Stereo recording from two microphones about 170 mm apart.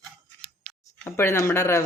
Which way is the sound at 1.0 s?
15° left (ahead or behind).